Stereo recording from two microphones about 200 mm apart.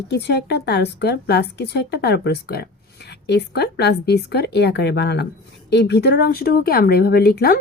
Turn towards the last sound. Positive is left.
turn(degrees=50)  # may be behind; listen again after turning